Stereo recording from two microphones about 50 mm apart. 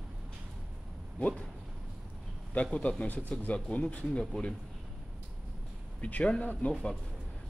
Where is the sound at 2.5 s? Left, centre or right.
Left.